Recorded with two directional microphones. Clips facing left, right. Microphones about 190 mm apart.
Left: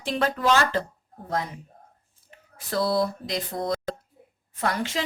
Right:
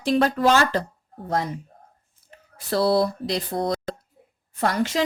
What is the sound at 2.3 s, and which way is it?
Speech, 35° right (ahead or behind).